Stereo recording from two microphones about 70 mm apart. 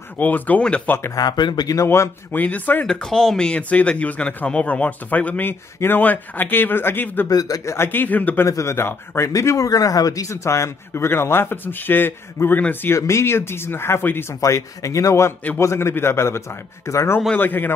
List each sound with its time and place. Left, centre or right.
0.2 s speech: left
1.1 s speech: left
1.8 s a man's voice: left
2.3 s speech: left
2.9 s speech: centre; by 7.2 s left
7.2 s speech: left
7.6 s speech: left
8.5 s a man's voice: left
9.3 s a man's voice: left
12.9 s a man's voice: left
14.4 s a man's voice: left
17.4 s speech: left